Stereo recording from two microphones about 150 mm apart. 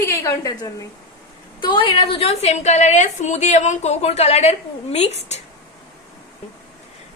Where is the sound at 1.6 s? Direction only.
30° left (ahead or behind); by 5.4 s 50° left (ahead or behind).